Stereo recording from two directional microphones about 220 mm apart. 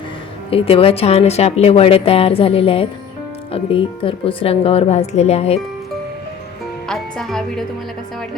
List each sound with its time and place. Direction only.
0.5 s a woman's voice: 25° left (ahead or behind)
6.8 s a woman's voice: centre (ahead or behind)